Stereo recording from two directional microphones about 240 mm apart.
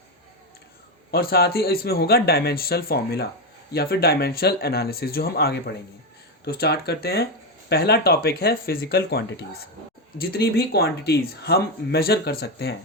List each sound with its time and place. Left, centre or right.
1.1 s speech: left